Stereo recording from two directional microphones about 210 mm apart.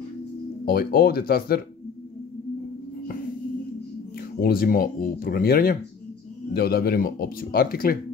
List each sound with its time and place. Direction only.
0.7 s speech: 45° left (ahead or behind)
4.4 s speech: 45° left (ahead or behind)